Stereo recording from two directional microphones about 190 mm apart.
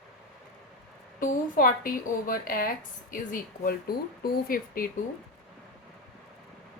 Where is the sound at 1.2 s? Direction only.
45° left (ahead or behind).